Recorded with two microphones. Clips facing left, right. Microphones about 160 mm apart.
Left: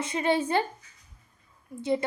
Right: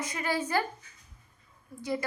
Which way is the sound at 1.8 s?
25° left (ahead or behind).